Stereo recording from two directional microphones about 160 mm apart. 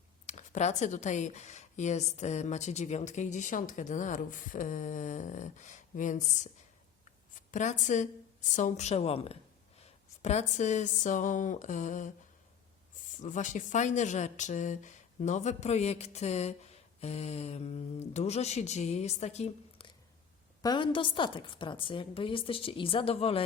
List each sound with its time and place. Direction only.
0.3 s speech: 45° left (ahead or behind)
7.5 s speech: 50° left (ahead or behind)
13.2 s speech: 50° left (ahead or behind)
20.6 s a woman's voice: 30° left (ahead or behind)